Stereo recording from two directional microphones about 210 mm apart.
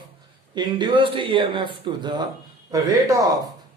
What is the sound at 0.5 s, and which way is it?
A man's voice, 20° right (ahead or behind).